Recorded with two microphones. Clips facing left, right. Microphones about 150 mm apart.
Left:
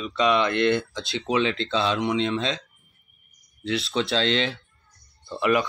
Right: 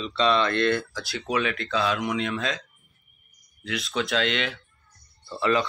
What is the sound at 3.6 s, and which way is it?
Speech, 30° left (ahead or behind).